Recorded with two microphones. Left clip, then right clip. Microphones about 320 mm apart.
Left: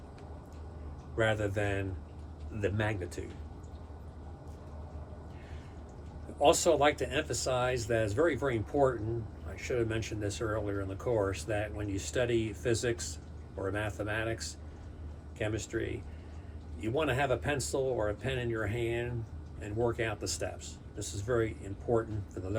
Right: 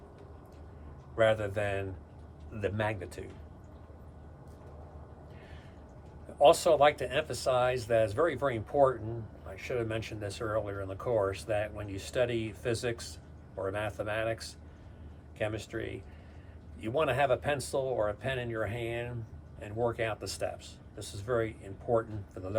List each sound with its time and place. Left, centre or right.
1.1 s speech: centre
6.4 s speech: centre